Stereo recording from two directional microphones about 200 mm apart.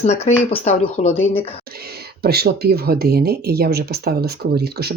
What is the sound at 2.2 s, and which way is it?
Speech, 50° right (ahead or behind).